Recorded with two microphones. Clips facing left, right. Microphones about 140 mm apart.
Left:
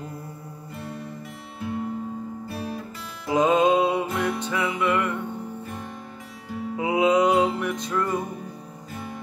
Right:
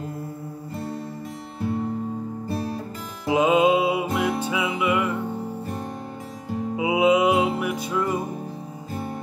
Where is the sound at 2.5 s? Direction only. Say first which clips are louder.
Right 6 dB; 40° right (ahead or behind).